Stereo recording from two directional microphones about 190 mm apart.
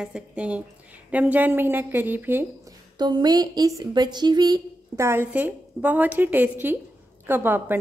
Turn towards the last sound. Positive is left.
turn(degrees=-10)  # may be behind; listen again after turning